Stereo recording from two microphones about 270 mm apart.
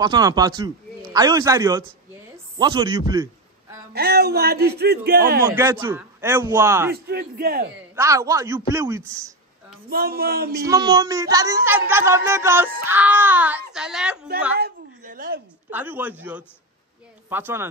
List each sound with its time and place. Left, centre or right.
0.0 s speech: centre
3.9 s a man's voice: right
5.5 s speech: centre
6.9 s a man's voice: right
7.9 s speech: centre
9.8 s a man's voice: right
10.6 s speech: centre
14.6 s a sound: right
15.7 s speech: centre